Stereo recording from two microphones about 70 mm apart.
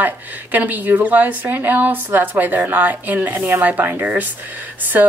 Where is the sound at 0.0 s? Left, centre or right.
Right.